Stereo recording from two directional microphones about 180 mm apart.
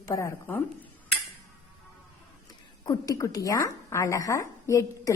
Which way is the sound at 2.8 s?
20° left (ahead or behind).